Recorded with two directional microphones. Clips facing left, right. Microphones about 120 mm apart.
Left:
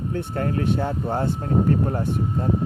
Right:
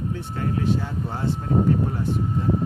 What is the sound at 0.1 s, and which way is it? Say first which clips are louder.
Speech: left 2 dB; 55° left (ahead or behind).